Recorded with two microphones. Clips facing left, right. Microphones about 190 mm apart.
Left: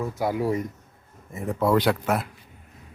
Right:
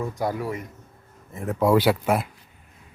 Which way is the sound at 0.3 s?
25° left (ahead or behind).